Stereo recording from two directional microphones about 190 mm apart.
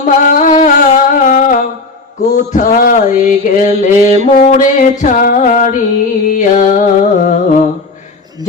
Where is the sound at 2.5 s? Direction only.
45° left (ahead or behind).